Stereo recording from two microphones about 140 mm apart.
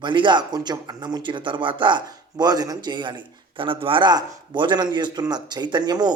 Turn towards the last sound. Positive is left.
turn(degrees=-30)  # may be behind; listen again after turning